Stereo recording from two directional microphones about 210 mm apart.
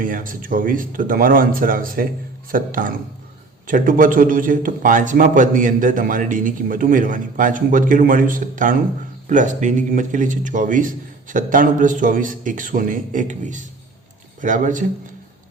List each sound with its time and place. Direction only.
0.0 s a man's voice: 40° right (ahead or behind)